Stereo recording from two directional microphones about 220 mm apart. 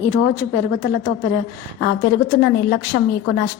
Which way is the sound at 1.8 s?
50° left (ahead or behind).